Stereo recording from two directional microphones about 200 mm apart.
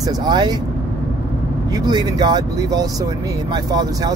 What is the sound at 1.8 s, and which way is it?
Speech, 20° right (ahead or behind).